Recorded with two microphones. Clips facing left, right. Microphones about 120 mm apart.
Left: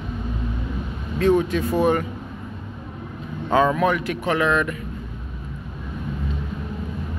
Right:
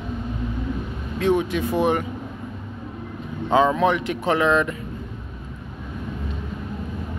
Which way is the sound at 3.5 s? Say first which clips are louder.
Right 1 dB; 20° right (ahead or behind).